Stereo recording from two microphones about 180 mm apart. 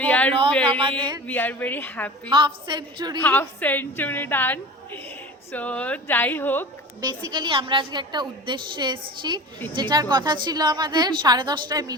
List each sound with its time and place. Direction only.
0.0 s a sound: 10° left (ahead or behind)
0.8 s a woman's voice: 30° right (ahead or behind)
1.3 s a woman's voice: 10° left (ahead or behind)
2.3 s a woman's voice: 25° right (ahead or behind)
3.2 s a woman's voice: 10° left (ahead or behind)
7.0 s a woman's voice: 25° right (ahead or behind)